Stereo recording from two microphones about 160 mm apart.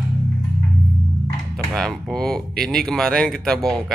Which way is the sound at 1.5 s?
5° left (ahead or behind).